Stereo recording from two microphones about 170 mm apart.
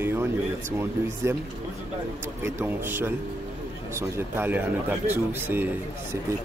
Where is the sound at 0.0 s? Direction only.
15° right (ahead or behind).